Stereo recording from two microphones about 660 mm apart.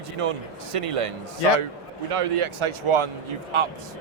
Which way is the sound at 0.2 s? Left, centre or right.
Right.